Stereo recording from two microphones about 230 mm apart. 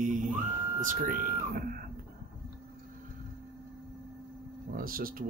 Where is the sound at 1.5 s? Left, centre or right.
Right.